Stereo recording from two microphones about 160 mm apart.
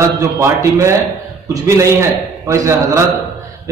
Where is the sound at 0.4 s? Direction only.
20° right (ahead or behind).